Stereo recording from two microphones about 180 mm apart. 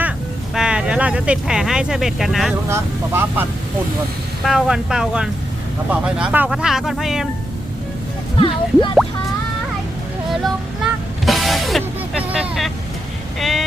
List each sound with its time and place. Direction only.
0.5 s speech: 5° right (ahead or behind)
2.6 s speech: 15° right (ahead or behind)
4.4 s speech: 5° right (ahead or behind)
8.4 s speech: 30° left (ahead or behind)
11.3 s music: centre (ahead or behind)
13.4 s speech: centre (ahead or behind)